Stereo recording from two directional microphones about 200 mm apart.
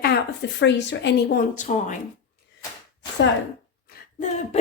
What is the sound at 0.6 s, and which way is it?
Speech, 60° left (ahead or behind).